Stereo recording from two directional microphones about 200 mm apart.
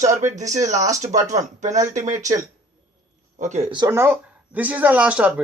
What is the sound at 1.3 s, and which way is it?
Speech, 35° right (ahead or behind).